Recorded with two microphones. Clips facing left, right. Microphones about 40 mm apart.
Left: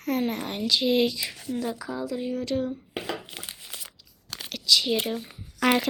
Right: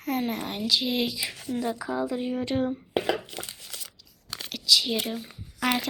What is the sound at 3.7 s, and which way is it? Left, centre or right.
Crumpling, left.